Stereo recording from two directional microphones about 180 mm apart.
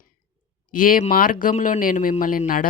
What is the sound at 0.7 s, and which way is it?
Speech, 50° left (ahead or behind).